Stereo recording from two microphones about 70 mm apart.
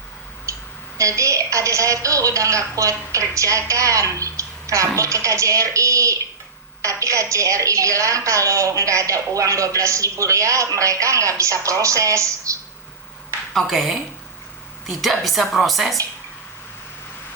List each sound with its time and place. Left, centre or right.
0.5 s a sound: right
0.9 s a woman's voice: right
13.5 s a woman's voice: centre